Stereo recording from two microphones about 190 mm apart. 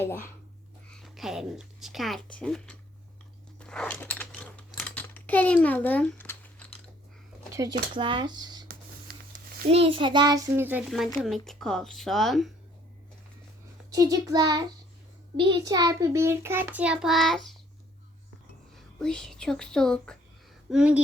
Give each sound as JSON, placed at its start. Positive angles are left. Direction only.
{"t": 0.0, "sound": "speech", "side_deg": 10}
{"t": 0.9, "sound": "speech", "side_deg": 0}
{"t": 3.6, "sound": "typing", "side_deg": 5}
{"t": 7.5, "sound": "speech", "side_deg": -20}
{"t": 9.6, "sound": "a child's voice", "side_deg": -30}
{"t": 13.9, "sound": "a child's voice", "side_deg": -20}
{"t": 18.7, "sound": "speech", "side_deg": 5}